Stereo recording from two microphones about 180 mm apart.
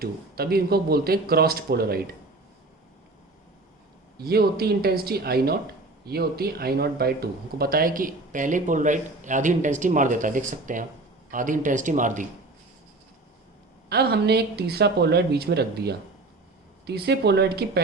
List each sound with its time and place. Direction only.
0.0 s speech: 60° right (ahead or behind)
4.2 s speech: 60° right (ahead or behind)
13.9 s speech: 60° right (ahead or behind)